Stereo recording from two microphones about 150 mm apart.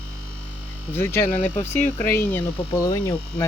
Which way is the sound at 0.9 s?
15° left (ahead or behind).